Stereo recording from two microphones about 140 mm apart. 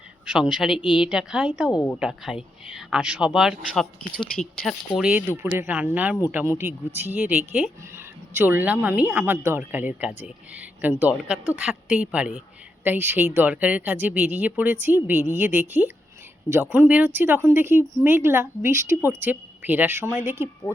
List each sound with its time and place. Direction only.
0.5 s speech: 5° right (ahead or behind)
0.8 s speech: 35° left (ahead or behind)
1.0 s speech: 5° right (ahead or behind)